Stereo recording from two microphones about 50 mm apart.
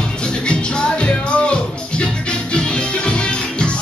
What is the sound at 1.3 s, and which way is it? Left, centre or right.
Music, left.